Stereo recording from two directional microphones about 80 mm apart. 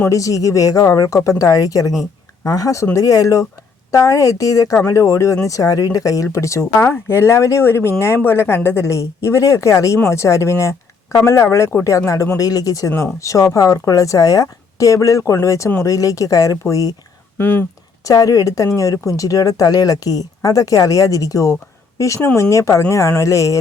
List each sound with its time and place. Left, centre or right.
0.0 s speech: left
17.3 s speech: left
18.0 s speech: left